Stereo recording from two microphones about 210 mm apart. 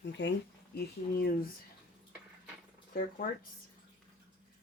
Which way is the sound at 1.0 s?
30° left (ahead or behind).